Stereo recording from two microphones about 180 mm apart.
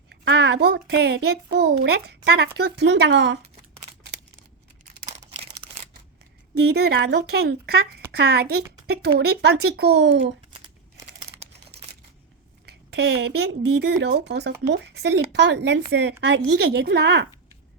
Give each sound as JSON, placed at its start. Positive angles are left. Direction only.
{"t": 0.1, "sound": "a child's voice", "side_deg": -70}
{"t": 5.3, "sound": "a sound", "side_deg": -35}
{"t": 6.6, "sound": "speech", "side_deg": -65}
{"t": 12.6, "sound": "speech", "side_deg": -65}